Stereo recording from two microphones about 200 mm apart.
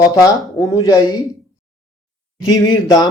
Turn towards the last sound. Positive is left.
turn(degrees=20)  # may be behind; listen again after turning